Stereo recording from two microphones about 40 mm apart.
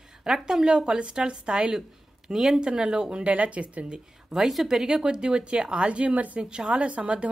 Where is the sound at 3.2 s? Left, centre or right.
Right.